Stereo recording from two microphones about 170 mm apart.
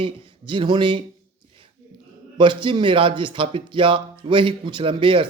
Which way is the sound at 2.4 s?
30° right (ahead or behind).